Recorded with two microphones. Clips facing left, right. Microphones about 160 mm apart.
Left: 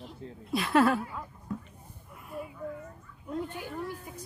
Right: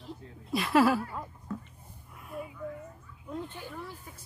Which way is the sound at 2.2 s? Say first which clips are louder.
Even; centre (ahead or behind).